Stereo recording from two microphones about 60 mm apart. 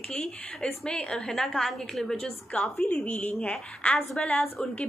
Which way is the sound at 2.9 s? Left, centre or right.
Left.